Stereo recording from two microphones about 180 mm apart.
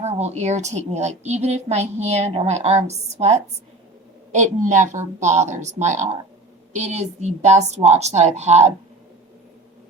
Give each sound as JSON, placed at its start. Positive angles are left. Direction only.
{"t": 0.0, "sound": "a woman's voice", "side_deg": -40}